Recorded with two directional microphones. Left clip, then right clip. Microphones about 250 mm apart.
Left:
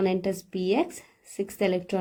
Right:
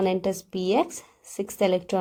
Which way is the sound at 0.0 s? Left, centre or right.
Right.